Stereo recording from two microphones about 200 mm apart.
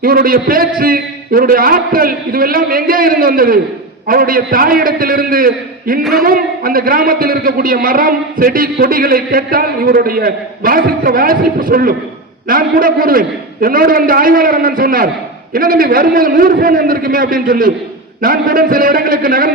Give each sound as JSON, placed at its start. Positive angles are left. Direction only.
{"t": 0.0, "sound": "a man's voice", "side_deg": -45}
{"t": 6.0, "sound": "a sound", "side_deg": 0}
{"t": 6.2, "sound": "a man's voice", "side_deg": -45}